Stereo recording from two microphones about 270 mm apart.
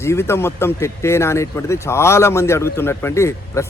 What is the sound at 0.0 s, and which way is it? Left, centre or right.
Speech, centre.